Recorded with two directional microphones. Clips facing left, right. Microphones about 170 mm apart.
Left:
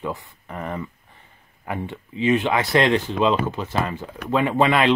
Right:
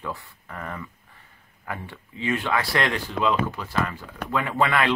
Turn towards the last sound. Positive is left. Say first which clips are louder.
# left 5 dB
turn(degrees=20)  # may be behind; listen again after turning